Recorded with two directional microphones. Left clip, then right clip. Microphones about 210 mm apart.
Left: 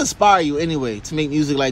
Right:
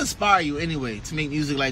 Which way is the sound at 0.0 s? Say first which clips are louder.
Left 6 dB; 20° left (ahead or behind).